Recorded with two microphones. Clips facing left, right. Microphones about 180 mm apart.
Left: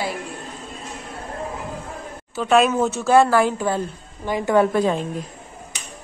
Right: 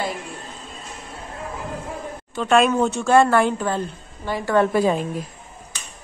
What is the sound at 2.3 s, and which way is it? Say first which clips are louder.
A woman's voice: even; 5° left (ahead or behind).